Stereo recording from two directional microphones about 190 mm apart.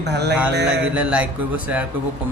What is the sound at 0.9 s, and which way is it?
Speech, 5° right (ahead or behind).